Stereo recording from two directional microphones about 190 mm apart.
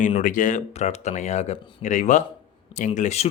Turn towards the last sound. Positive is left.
turn(degrees=35)  # may be behind; listen again after turning